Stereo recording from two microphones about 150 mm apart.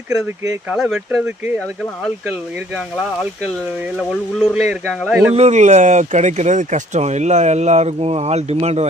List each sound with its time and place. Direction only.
0.1 s speech: 20° right (ahead or behind)
3.9 s speech: centre (ahead or behind)
5.3 s speech: 45° right (ahead or behind)